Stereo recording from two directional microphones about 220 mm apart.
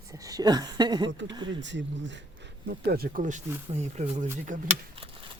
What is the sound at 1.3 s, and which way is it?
Speech, 20° right (ahead or behind).